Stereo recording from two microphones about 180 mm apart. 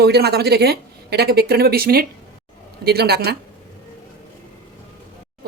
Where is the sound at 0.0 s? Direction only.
65° right (ahead or behind).